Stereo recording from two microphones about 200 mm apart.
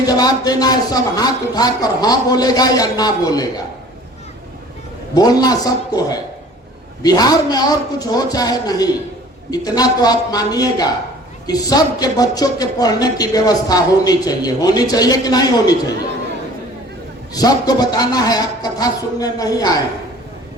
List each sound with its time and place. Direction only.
0.0 s speech: 20° left (ahead or behind)
5.1 s speech: 20° left (ahead or behind)
17.3 s speech: 20° left (ahead or behind)